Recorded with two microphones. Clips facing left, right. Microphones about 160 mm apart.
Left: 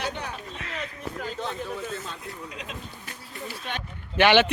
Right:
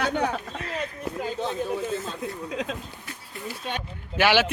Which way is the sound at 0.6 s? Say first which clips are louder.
Right 3 dB; 35° right (ahead or behind).